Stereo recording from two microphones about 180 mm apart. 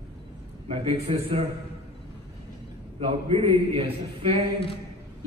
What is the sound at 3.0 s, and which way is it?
A man's voice, 30° right (ahead or behind).